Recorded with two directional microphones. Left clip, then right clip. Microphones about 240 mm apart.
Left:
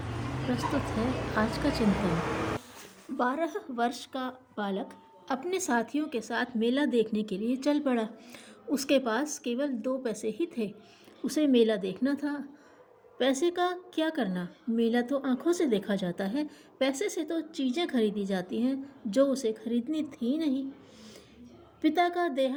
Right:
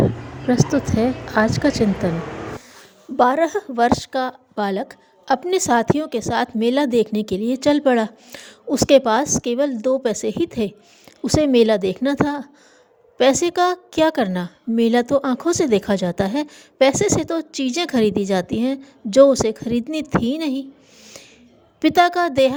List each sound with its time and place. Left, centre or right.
0.5 s a woman's voice: right
3.2 s a woman's voice: right
21.8 s a woman's voice: right